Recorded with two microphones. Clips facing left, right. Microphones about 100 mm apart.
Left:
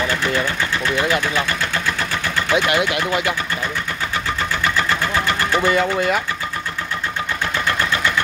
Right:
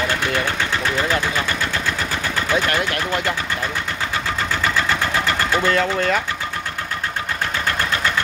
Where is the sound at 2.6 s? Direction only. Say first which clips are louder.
Left 3 dB; 10° left (ahead or behind).